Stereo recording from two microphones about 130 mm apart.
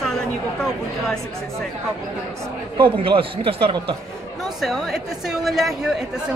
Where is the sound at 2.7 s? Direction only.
40° right (ahead or behind).